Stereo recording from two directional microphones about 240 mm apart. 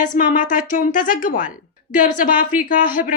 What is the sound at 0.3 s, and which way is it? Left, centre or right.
A woman's voice, left.